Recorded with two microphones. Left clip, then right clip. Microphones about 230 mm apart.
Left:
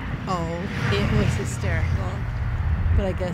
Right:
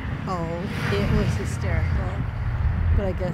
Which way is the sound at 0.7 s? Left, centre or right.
Right.